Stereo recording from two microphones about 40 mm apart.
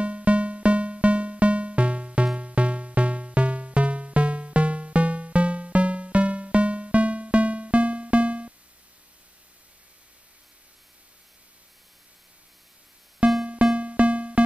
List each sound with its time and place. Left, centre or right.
0.0 s music: right
13.2 s music: right